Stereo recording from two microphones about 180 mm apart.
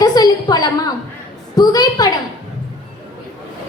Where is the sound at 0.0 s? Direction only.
20° left (ahead or behind).